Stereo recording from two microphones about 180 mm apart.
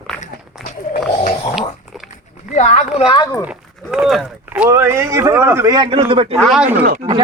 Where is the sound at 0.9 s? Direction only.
50° left (ahead or behind).